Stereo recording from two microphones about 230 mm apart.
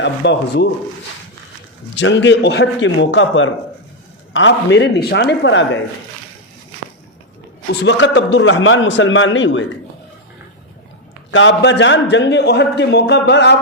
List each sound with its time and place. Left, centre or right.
0.0 s a man's voice: left
2.0 s a man's voice: left
7.7 s a man's voice: left
11.3 s a man's voice: left